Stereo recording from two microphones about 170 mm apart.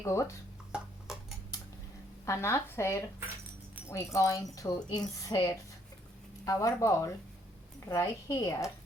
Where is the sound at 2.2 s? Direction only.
15° left (ahead or behind).